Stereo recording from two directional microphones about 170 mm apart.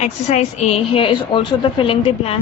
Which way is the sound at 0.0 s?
40° left (ahead or behind).